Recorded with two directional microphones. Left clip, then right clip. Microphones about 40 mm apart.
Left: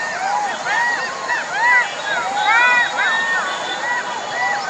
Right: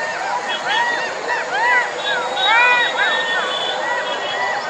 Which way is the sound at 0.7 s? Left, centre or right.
Right.